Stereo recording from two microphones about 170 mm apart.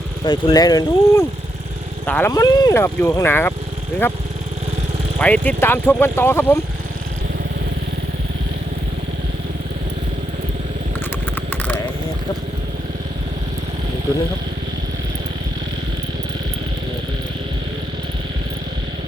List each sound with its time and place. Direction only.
0.3 s speech: 25° left (ahead or behind)
2.0 s speech: 10° left (ahead or behind)
2.3 s speech: 20° left (ahead or behind)
5.2 s speech: 10° left (ahead or behind)